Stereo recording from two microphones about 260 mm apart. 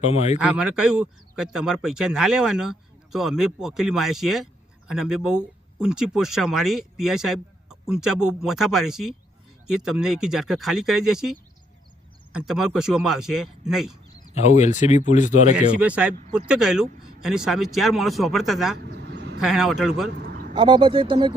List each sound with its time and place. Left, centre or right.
0.0 s speech: left
0.3 s speech: centre
14.3 s speech: left
15.5 s speech: centre
16.1 s speech: right
16.5 s speech: centre
18.9 s vehicle: right
19.4 s speech: centre
20.5 s speech: centre